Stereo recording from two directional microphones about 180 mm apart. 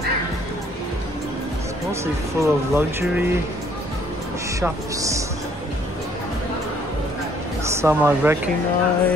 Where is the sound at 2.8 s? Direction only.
10° right (ahead or behind).